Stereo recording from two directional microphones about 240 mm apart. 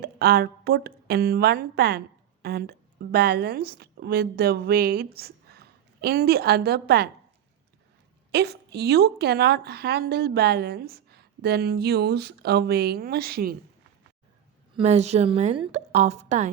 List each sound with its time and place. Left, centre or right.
0.0 s speech: right
8.3 s speech: right
14.8 s a woman's voice: right